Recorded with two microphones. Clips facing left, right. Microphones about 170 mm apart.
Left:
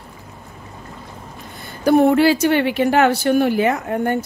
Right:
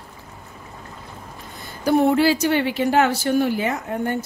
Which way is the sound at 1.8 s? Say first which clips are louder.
Left 4 dB; 60° left (ahead or behind).